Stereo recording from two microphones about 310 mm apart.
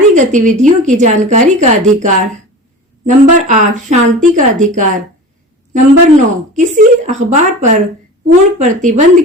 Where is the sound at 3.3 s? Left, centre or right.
Right.